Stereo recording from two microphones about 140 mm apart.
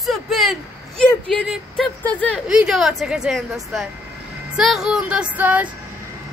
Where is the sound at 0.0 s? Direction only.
Centre (ahead or behind).